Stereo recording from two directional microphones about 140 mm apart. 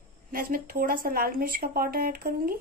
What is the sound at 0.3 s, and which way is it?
A woman's voice, 90° right.